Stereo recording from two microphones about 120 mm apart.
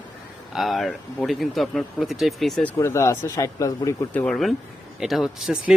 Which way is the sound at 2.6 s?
20° left (ahead or behind).